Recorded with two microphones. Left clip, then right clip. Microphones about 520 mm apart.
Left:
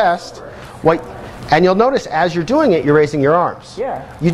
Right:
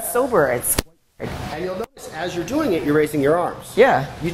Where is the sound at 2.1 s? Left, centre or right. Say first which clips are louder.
Left 4 dB; left.